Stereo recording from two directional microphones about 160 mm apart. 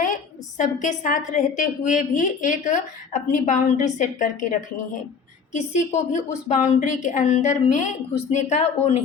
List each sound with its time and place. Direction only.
0.0 s a woman's voice: 55° left (ahead or behind)
6.1 s a woman's voice: 50° left (ahead or behind)